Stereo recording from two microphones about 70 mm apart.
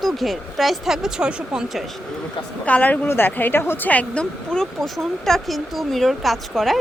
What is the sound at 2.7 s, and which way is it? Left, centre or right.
Speech, left.